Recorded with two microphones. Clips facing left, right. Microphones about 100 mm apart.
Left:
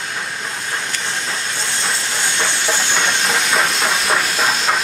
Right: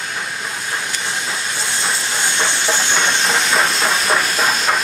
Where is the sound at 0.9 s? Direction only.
10° right (ahead or behind).